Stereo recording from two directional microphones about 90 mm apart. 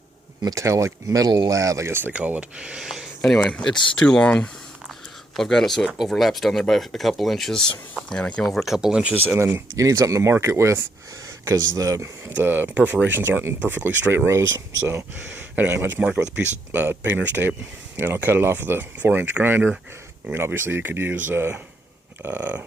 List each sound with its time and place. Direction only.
0.4 s speech: 35° right (ahead or behind)
2.1 s speech: 15° right (ahead or behind); by 4.3 s 5° left (ahead or behind)
5.4 s speech: 5° left (ahead or behind)
8.5 s speech: 5° right (ahead or behind)
9.1 s speech: 20° right (ahead or behind)
15.7 s speech: 20° right (ahead or behind)
16.0 s speech: 10° right (ahead or behind)
16.7 s speech: 20° right (ahead or behind)